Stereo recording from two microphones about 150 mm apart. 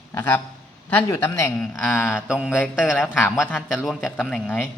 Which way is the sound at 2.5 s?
15° left (ahead or behind).